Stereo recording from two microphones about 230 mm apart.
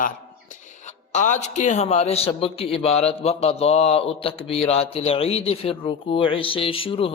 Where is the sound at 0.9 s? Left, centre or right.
Left.